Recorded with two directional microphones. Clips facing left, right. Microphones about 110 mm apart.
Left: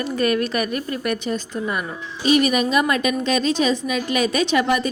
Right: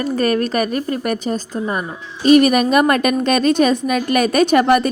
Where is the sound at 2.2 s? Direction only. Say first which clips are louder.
Right 6 dB; 50° right (ahead or behind).